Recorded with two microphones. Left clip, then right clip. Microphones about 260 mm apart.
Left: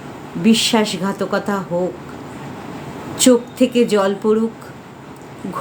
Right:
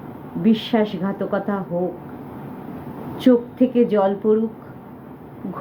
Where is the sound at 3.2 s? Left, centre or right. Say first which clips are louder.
Left 3 dB; centre.